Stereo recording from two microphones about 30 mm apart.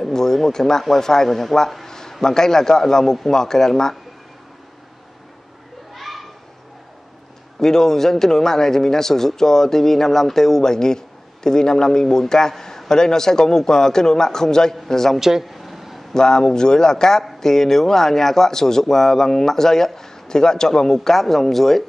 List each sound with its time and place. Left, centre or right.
0.1 s speech: centre
1.9 s a sound: centre
2.2 s speech: centre
5.9 s children playing: centre
7.6 s speech: centre
15.1 s speech: centre
15.4 s a sound: centre
16.1 s a man's voice: left